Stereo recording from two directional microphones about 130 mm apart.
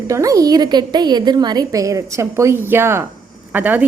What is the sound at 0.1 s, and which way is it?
A woman's voice, 25° right (ahead or behind).